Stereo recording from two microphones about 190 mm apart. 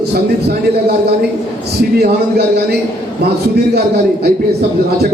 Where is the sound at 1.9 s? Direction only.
55° right (ahead or behind).